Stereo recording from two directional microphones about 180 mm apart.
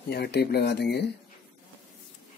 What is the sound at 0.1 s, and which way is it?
Speech, 65° left (ahead or behind).